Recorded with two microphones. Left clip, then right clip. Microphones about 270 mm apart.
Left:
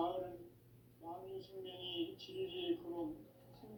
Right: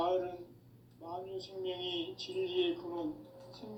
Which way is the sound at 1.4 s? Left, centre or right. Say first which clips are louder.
Right 9 dB; right.